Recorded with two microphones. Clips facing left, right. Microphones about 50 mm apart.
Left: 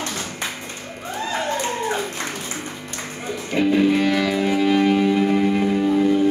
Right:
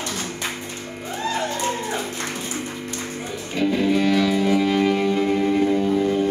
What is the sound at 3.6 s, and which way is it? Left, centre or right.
Music, left.